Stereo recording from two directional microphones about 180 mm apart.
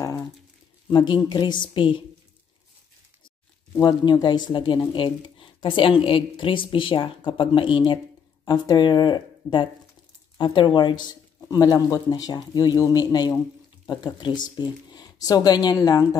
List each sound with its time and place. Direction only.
0.8 s a woman's voice: 25° left (ahead or behind)
3.8 s a woman's voice: 25° left (ahead or behind)